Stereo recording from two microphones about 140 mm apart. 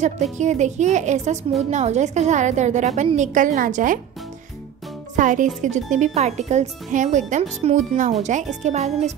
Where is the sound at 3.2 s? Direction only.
70° right (ahead or behind).